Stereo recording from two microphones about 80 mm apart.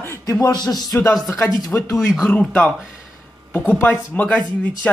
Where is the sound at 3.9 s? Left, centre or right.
Centre.